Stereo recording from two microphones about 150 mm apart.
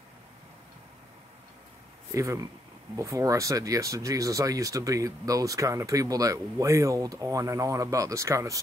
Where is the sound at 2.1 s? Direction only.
20° right (ahead or behind).